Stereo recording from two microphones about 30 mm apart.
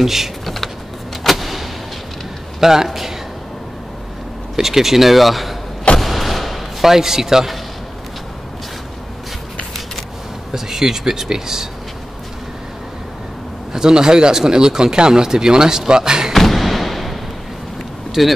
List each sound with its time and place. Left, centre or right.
0.0 s speech: centre
1.3 s vehicle: centre
2.6 s speech: centre
4.6 s speech: centre
5.9 s a sound: centre
6.8 s speech: centre
10.5 s speech: centre
13.7 s speech: right
16.3 s a sound: centre
18.2 s speech: centre